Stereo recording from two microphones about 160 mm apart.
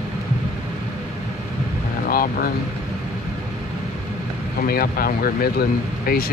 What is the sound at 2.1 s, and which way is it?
Boat, 70° left (ahead or behind).